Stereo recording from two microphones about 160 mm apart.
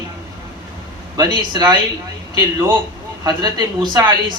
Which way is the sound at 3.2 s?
25° right (ahead or behind).